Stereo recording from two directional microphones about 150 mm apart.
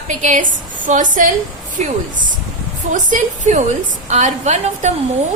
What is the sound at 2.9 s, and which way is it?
A woman's voice, 55° right (ahead or behind).